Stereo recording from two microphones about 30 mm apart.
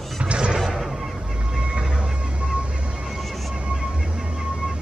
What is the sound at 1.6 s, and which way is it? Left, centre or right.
Vehicle, right.